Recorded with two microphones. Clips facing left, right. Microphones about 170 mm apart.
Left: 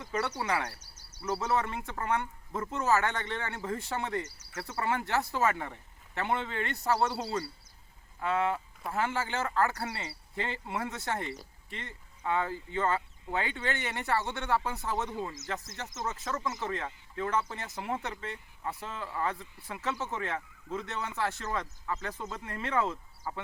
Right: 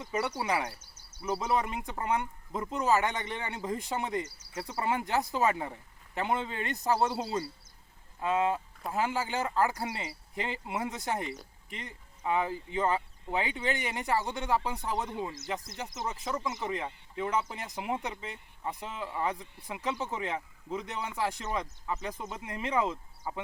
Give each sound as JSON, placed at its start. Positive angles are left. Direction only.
{"t": 0.0, "sound": "speech", "side_deg": -15}